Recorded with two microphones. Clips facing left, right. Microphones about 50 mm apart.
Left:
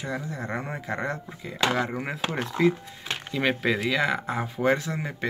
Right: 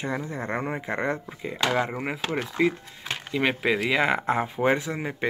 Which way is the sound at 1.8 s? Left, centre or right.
Centre.